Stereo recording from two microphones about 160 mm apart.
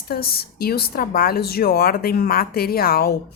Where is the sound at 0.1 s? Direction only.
75° left (ahead or behind).